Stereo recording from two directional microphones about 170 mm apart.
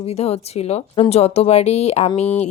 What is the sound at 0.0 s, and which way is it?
Speech, 40° left (ahead or behind).